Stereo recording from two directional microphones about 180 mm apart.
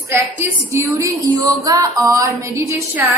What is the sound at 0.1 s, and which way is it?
A woman's voice, 15° right (ahead or behind).